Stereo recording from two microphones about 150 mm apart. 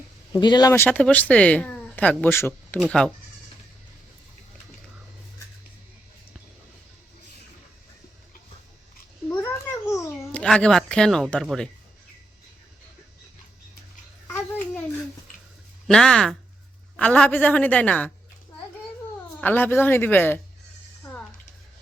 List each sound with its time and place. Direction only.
0.3 s speech: 25° left (ahead or behind)
0.7 s speech: 15° left (ahead or behind)
9.3 s a sound: 15° left (ahead or behind)
10.3 s speech: 5° left (ahead or behind)
14.3 s a sound: 15° left (ahead or behind)
15.9 s speech: 5° left (ahead or behind)
19.4 s speech: 15° left (ahead or behind)